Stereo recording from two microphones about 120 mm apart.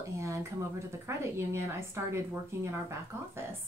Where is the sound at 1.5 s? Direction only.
20° right (ahead or behind).